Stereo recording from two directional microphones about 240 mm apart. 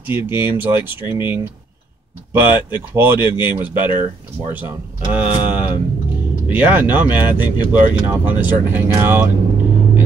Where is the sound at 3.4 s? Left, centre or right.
Centre.